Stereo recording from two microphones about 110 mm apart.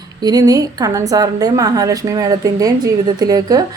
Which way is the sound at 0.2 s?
35° right (ahead or behind).